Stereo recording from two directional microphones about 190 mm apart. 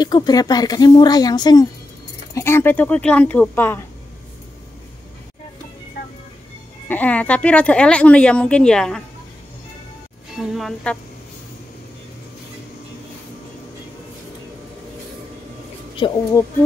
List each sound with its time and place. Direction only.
0.0 s speech: 20° left (ahead or behind)
6.9 s speech: 10° left (ahead or behind)
10.3 s speech: centre (ahead or behind)